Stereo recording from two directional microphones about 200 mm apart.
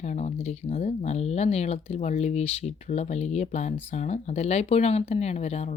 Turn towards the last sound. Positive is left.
turn(degrees=35)  # may be behind; listen again after turning